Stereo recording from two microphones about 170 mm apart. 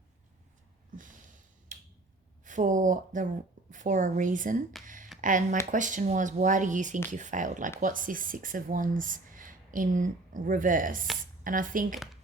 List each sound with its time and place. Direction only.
1.7 s tick-tock: 50° right (ahead or behind)
2.4 s speech: 50° right (ahead or behind)